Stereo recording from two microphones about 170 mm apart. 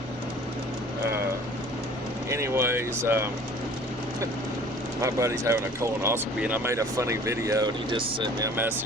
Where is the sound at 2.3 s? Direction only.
15° right (ahead or behind).